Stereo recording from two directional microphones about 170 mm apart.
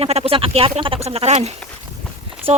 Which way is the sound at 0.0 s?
35° right (ahead or behind).